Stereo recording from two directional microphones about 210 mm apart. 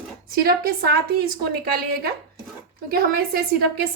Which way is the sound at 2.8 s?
45° right (ahead or behind).